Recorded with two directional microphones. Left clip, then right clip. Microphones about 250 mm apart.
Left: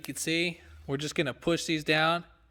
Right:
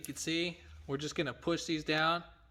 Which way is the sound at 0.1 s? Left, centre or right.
Left.